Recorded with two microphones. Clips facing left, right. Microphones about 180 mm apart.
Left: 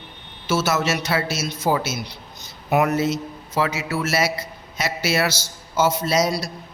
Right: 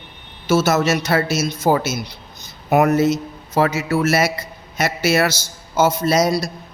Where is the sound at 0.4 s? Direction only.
45° right (ahead or behind).